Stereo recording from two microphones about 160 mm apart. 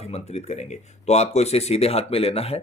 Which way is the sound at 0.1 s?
40° left (ahead or behind).